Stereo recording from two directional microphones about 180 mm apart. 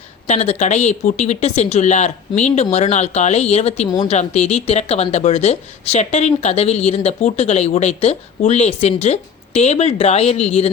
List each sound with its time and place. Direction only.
0.3 s speech: 35° left (ahead or behind)
3.8 s speech: 20° left (ahead or behind)
4.1 s speech: 35° left (ahead or behind)